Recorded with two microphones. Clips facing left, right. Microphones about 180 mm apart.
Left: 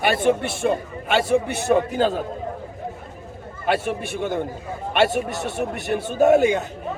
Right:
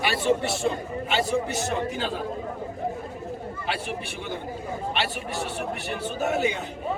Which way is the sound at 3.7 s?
50° left (ahead or behind).